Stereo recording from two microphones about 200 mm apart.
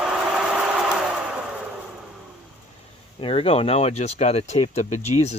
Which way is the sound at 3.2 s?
30° left (ahead or behind).